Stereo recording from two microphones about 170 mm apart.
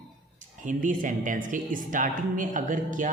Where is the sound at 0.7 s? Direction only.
50° right (ahead or behind).